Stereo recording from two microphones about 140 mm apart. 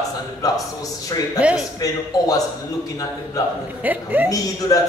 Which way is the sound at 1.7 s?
25° left (ahead or behind).